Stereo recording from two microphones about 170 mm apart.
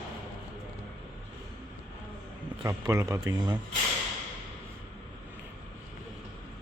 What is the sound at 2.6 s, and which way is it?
Speech, 20° right (ahead or behind).